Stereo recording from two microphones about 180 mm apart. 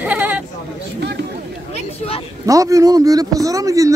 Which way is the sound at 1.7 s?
30° left (ahead or behind).